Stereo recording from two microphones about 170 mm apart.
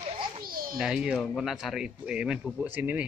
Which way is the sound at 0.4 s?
60° right (ahead or behind).